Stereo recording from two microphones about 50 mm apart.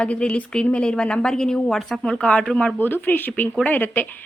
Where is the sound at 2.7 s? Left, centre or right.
Left.